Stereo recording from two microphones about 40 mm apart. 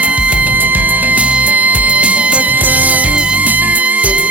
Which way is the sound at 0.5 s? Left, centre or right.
Right.